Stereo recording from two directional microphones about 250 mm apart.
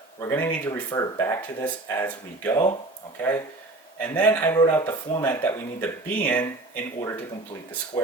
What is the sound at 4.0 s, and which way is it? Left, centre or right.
Speech, centre.